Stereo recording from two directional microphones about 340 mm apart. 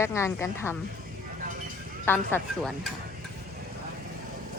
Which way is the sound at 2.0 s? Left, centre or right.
Centre.